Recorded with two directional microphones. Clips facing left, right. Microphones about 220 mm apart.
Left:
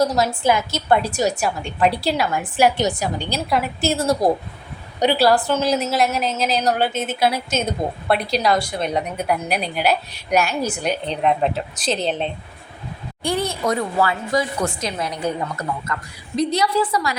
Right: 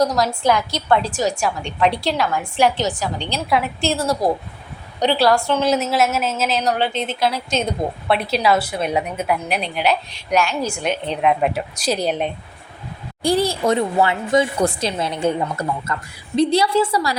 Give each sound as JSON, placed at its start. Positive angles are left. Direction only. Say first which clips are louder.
{"t": 0.0, "sound": "a woman's voice", "louder": "even", "side_deg": 5}
{"t": 3.8, "sound": "a woman's voice", "louder": "left 2 dB", "side_deg": 45}
{"t": 4.9, "sound": "a woman's voice", "louder": "even", "side_deg": 5}
{"t": 13.2, "sound": "a woman's voice", "louder": "right 4 dB", "side_deg": -35}